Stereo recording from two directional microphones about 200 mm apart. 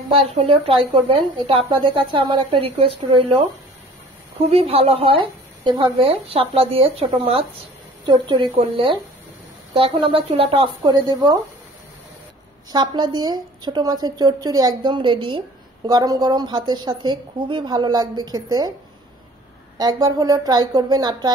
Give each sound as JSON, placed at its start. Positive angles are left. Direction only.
{"t": 0.1, "sound": "speech", "side_deg": -30}
{"t": 4.5, "sound": "speech", "side_deg": -30}
{"t": 12.7, "sound": "speech", "side_deg": -20}
{"t": 19.8, "sound": "speech", "side_deg": -20}